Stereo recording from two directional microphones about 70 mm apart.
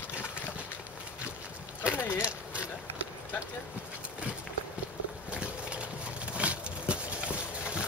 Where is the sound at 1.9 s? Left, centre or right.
Left.